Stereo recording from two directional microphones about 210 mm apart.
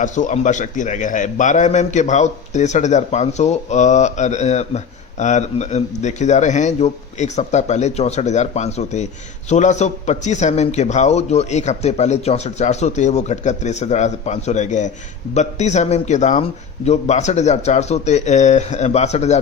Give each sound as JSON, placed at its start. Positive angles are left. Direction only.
{"t": 0.0, "sound": "a man's voice", "side_deg": 35}